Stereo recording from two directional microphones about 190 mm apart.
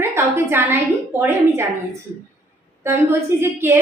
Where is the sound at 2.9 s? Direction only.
15° right (ahead or behind).